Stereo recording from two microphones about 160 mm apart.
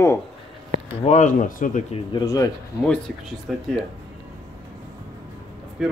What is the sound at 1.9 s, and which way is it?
Speech, 25° left (ahead or behind).